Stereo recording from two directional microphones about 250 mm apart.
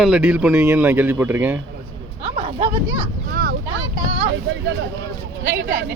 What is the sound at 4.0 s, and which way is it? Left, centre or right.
Vehicle, right.